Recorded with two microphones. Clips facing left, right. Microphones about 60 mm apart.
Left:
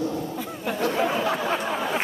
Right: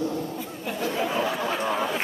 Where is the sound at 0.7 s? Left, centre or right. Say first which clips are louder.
Left 4 dB; left.